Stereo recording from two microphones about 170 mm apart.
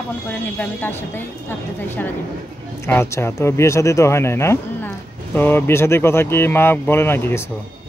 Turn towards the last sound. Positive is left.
turn(degrees=15)  # may be behind; listen again after turning